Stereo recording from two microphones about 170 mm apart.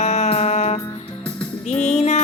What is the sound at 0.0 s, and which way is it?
Music, 40° left (ahead or behind).